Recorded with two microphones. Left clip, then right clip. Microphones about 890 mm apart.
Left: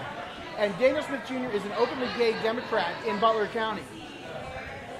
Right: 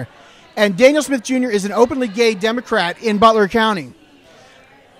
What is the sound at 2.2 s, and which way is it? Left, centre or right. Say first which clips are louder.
A man's voice: right 10 dB; right.